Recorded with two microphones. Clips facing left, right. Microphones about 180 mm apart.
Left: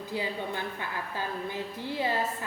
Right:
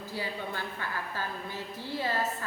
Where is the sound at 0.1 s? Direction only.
20° left (ahead or behind).